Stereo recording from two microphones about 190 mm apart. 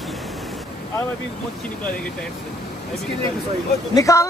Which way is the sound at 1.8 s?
5° left (ahead or behind).